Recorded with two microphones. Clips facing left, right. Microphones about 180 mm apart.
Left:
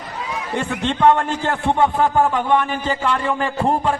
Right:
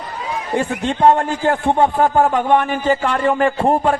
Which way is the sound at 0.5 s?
40° right (ahead or behind).